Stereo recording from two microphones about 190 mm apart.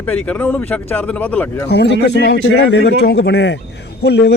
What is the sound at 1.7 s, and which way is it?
A man's voice, 65° left (ahead or behind).